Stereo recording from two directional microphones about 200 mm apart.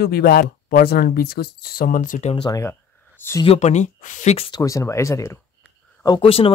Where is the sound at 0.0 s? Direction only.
50° left (ahead or behind).